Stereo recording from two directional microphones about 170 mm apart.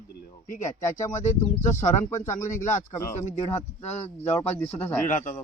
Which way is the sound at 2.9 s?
15° left (ahead or behind).